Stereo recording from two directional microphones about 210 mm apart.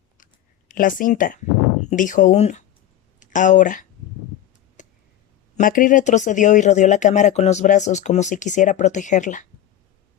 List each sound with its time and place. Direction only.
0.7 s speech: 40° left (ahead or behind)
4.8 s a sound: 35° left (ahead or behind)
5.5 s speech: 40° left (ahead or behind)